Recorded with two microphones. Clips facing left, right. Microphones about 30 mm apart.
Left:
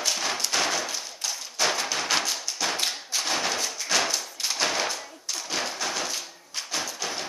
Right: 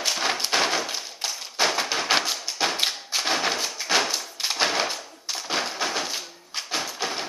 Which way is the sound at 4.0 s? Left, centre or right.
Centre.